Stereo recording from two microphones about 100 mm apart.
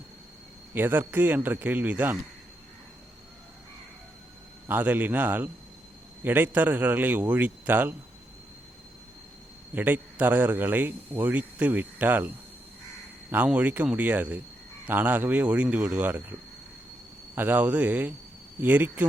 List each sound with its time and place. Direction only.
0.7 s a man's voice: 20° right (ahead or behind)
4.6 s a man's voice: 20° right (ahead or behind)
9.7 s a man's voice: 20° right (ahead or behind)
13.3 s a man's voice: 15° right (ahead or behind)
17.3 s a man's voice: 20° right (ahead or behind)